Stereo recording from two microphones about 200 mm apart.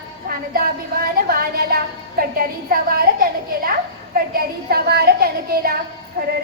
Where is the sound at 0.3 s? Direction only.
45° right (ahead or behind).